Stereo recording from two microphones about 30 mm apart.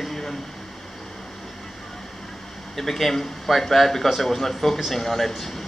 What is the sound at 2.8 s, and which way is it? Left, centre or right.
Speech, centre.